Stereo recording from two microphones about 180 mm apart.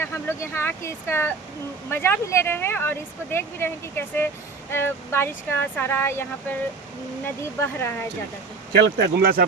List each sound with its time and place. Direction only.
0.0 s speech: 15° left (ahead or behind)
7.6 s speech: 15° left (ahead or behind)
8.7 s speech: 65° right (ahead or behind)